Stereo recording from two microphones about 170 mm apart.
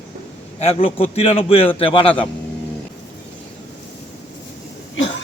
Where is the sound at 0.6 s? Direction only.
35° left (ahead or behind).